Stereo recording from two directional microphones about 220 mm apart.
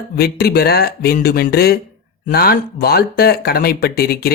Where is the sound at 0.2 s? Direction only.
45° left (ahead or behind).